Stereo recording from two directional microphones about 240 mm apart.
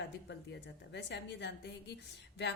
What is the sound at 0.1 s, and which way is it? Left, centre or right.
A woman's voice, left.